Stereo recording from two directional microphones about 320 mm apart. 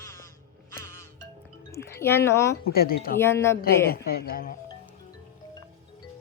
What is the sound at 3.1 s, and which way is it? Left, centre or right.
Speech, centre.